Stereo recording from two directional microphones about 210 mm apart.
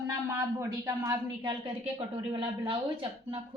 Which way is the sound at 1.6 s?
25° right (ahead or behind).